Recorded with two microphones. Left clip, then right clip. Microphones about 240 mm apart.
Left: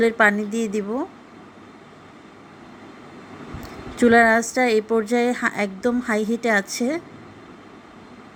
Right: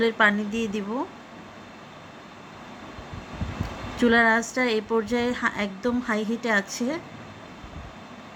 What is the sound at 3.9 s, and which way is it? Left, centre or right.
A woman's voice, centre.